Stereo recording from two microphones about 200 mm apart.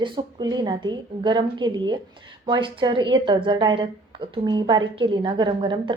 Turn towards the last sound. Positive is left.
turn(degrees=-25)  # may be behind; listen again after turning